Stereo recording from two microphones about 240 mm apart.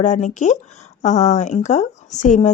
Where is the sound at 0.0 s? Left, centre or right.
Left.